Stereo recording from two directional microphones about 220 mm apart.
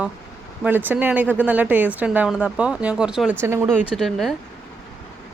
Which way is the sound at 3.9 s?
Centre (ahead or behind).